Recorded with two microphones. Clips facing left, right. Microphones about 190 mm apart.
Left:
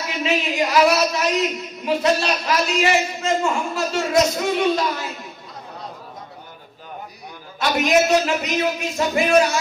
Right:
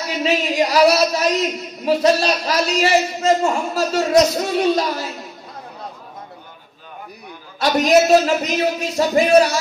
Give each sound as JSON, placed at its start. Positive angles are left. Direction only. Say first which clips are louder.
{"t": 0.2, "sound": "a man's voice", "louder": "right 3 dB", "side_deg": -40}
{"t": 7.5, "sound": "a man's voice", "louder": "right 4 dB", "side_deg": -40}